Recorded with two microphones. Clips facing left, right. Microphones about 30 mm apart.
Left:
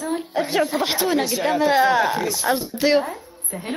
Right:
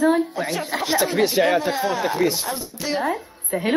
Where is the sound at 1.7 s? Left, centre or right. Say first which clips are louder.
Left 5 dB; left.